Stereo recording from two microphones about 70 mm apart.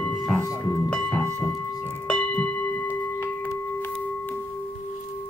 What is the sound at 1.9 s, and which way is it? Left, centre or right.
Singing bowl, centre.